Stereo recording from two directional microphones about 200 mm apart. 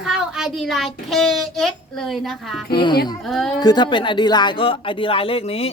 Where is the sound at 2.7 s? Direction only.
25° left (ahead or behind).